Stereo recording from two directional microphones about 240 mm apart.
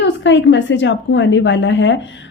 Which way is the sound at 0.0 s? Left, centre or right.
Left.